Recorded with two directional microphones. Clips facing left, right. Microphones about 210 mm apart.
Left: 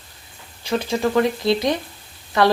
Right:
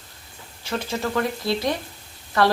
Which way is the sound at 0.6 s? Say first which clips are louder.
Left 6 dB; 15° left (ahead or behind).